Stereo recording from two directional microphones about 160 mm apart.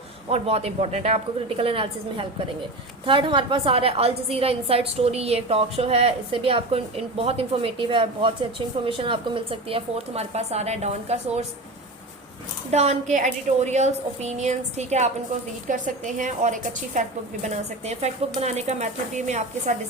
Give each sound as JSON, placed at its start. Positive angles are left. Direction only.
{"t": 0.3, "sound": "a woman's voice", "side_deg": -40}
{"t": 12.7, "sound": "a woman's voice", "side_deg": -45}